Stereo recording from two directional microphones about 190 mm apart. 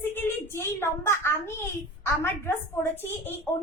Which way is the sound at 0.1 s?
10° left (ahead or behind).